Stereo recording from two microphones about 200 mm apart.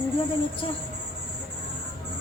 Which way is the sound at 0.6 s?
25° left (ahead or behind).